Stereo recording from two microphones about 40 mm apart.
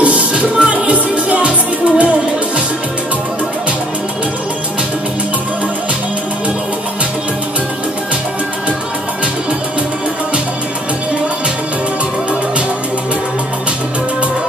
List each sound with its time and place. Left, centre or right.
0.0 s music: right